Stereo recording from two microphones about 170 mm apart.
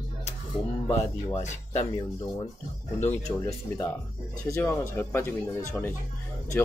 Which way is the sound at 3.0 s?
40° left (ahead or behind).